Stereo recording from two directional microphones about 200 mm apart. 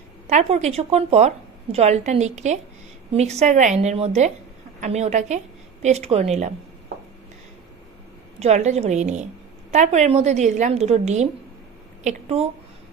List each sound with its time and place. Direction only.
0.3 s a woman's voice: 35° right (ahead or behind)
8.4 s a woman's voice: 35° right (ahead or behind)